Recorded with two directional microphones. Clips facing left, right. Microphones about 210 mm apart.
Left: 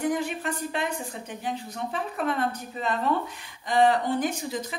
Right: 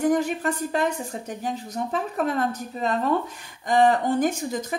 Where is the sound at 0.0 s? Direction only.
45° right (ahead or behind).